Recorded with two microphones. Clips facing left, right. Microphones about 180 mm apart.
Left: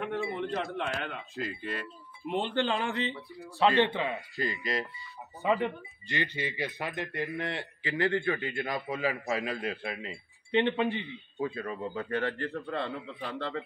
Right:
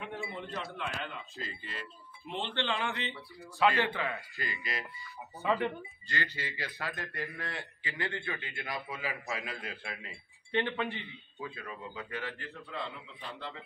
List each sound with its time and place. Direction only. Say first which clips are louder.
0.0 s a man's voice: left 8 dB; 60° left (ahead or behind); by 4.2 s 20° left (ahead or behind)
4.4 s speech: left 7 dB; 35° left (ahead or behind)
5.4 s speech: left 3 dB; 20° left (ahead or behind); by 9.6 s 35° left (ahead or behind)
9.6 s speech: left 8 dB; 25° left (ahead or behind)
11.3 s speech: left 9 dB; 40° left (ahead or behind); by 12.9 s 60° left (ahead or behind)
13.0 s speech: left 7 dB; 75° left (ahead or behind)